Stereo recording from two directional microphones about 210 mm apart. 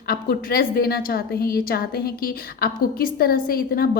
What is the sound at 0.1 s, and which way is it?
A woman's voice, 45° left (ahead or behind).